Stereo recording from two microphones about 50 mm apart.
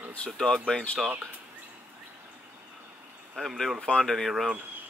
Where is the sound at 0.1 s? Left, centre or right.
Centre.